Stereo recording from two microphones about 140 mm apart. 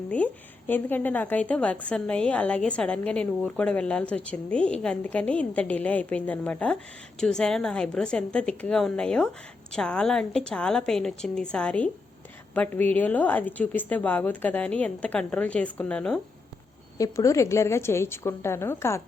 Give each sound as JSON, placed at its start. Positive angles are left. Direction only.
{"t": 0.7, "sound": "a woman's voice", "side_deg": 15}
{"t": 17.0, "sound": "a woman's voice", "side_deg": 20}